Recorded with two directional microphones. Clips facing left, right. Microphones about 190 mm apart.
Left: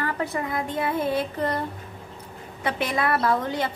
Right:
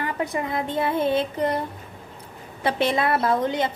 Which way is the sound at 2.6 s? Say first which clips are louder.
Right 3 dB; 30° right (ahead or behind).